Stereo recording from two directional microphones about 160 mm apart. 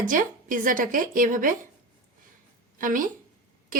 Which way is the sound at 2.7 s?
60° right (ahead or behind).